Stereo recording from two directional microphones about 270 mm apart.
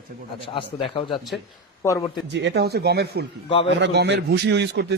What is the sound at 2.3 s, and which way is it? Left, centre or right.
A man's voice, right.